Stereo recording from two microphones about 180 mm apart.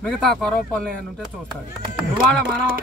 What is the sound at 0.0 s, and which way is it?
Speech, 5° left (ahead or behind).